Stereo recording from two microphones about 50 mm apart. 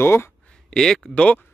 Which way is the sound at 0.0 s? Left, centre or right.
Left.